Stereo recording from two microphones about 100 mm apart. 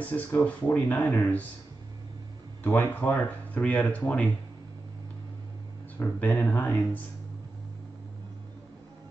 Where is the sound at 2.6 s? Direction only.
20° left (ahead or behind).